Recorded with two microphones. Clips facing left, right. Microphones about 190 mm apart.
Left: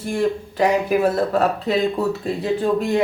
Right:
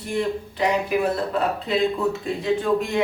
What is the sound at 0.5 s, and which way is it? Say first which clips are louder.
Speech: left 3 dB; 45° left (ahead or behind).